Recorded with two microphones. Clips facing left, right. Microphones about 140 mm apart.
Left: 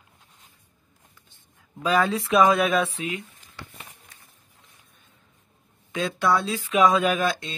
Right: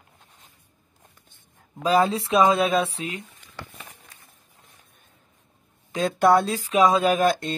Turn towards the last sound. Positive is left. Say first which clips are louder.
# right 4 dB
turn(degrees=-45)  # may be behind; listen again after turning